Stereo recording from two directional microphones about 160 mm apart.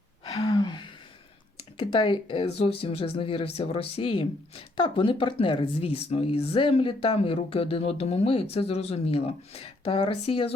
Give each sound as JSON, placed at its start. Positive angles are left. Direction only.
{"t": 0.3, "sound": "gasp", "side_deg": 30}
{"t": 1.8, "sound": "speech", "side_deg": 30}